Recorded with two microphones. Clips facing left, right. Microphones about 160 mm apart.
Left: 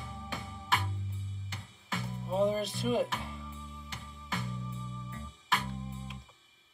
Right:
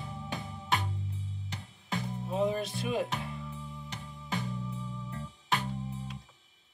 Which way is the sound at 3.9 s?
20° right (ahead or behind).